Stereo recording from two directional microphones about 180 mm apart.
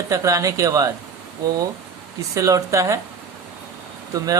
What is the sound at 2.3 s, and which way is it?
Speech, 20° right (ahead or behind).